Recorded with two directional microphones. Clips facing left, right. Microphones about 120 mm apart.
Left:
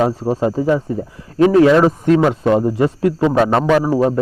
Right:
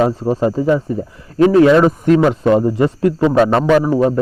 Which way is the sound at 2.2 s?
10° left (ahead or behind).